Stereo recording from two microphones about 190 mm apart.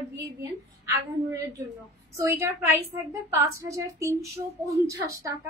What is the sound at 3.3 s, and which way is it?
Speech, 15° right (ahead or behind).